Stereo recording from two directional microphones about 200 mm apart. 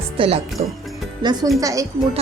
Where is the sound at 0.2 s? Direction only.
30° right (ahead or behind).